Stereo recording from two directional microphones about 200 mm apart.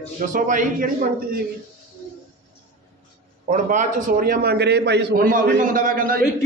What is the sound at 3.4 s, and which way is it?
A man's voice, 40° right (ahead or behind).